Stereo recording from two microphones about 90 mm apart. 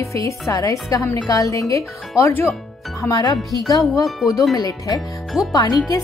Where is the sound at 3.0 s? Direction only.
40° left (ahead or behind).